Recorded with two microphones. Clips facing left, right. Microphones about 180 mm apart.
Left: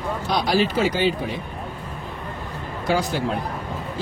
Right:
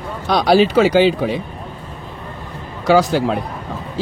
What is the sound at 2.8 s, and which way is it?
Speech, 90° right.